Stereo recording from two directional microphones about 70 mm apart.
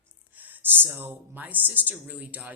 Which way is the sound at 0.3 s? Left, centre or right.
Right.